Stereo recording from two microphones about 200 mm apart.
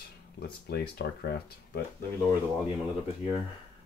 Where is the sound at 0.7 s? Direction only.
50° left (ahead or behind).